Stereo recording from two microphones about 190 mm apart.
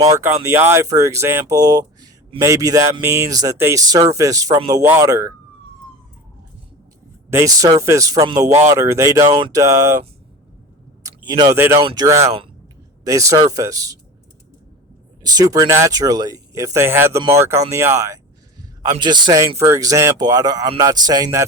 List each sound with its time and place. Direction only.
0.0 s speech: 15° right (ahead or behind)
7.3 s speech: 15° right (ahead or behind)
11.0 s speech: 20° right (ahead or behind)
15.2 s speech: 20° right (ahead or behind)